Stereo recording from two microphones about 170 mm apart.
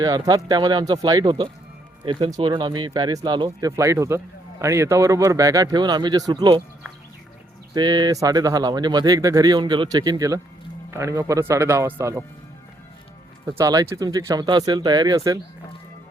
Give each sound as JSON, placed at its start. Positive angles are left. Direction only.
{"t": 0.0, "sound": "speech", "side_deg": -25}
{"t": 7.7, "sound": "speech", "side_deg": -25}
{"t": 13.4, "sound": "speech", "side_deg": -20}